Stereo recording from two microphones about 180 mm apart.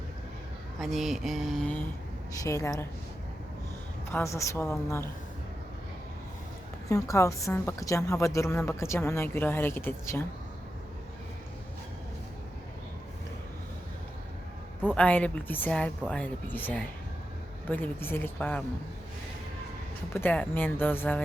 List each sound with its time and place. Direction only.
0.8 s a sound: centre (ahead or behind)
2.4 s a woman's voice: 20° left (ahead or behind)
4.1 s a woman's voice: 15° left (ahead or behind)
6.8 s a woman's voice: 15° left (ahead or behind)
14.8 s a woman's voice: 5° left (ahead or behind)
20.1 s a woman's voice: 10° left (ahead or behind)